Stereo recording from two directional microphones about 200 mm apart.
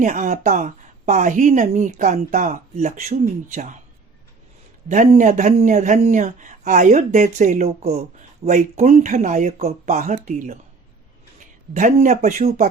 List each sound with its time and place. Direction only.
0.0 s a woman's voice: 40° right (ahead or behind)
4.9 s a woman's voice: 40° right (ahead or behind)